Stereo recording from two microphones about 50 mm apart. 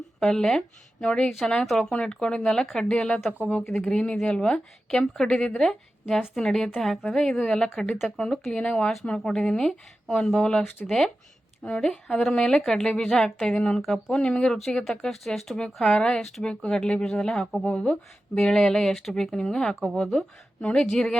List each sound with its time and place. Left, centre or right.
0.2 s a woman's voice: centre
2.5 s a woman's voice: centre
11.6 s a woman's voice: centre
15.5 s a woman's voice: centre
17.7 s speech: left
18.3 s a woman's voice: centre
19.9 s speech: centre
20.7 s a woman's voice: centre